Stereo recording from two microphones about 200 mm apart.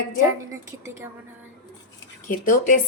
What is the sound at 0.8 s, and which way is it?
Speech, 15° right (ahead or behind).